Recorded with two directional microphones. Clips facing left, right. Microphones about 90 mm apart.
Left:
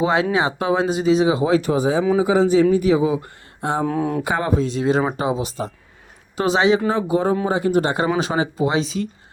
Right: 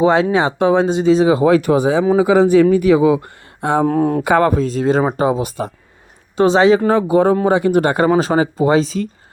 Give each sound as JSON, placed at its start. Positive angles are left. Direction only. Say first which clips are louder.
{"t": 0.0, "sound": "speech", "louder": "right 5 dB", "side_deg": -35}
{"t": 3.8, "sound": "speech", "louder": "right 6 dB", "side_deg": -45}
{"t": 4.3, "sound": "speech", "louder": "right 7 dB", "side_deg": -60}
{"t": 6.3, "sound": "speech", "louder": "right 6 dB", "side_deg": -35}
{"t": 6.9, "sound": "speech", "louder": "right 6 dB", "side_deg": -65}